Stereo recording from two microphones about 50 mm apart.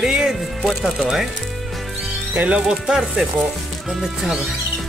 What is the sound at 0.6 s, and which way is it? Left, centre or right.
Speech, centre.